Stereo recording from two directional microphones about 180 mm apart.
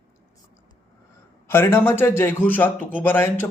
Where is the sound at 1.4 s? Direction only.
15° left (ahead or behind).